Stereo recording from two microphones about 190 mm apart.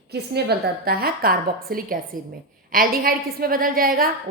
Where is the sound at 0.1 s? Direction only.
60° right (ahead or behind).